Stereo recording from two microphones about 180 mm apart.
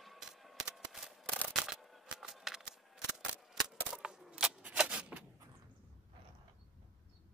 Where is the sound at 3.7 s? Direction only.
5° right (ahead or behind).